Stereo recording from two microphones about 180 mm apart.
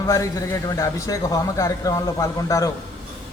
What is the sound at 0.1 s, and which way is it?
A man's voice, 20° left (ahead or behind).